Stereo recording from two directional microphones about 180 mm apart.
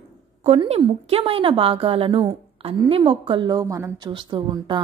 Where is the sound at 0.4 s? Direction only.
35° right (ahead or behind).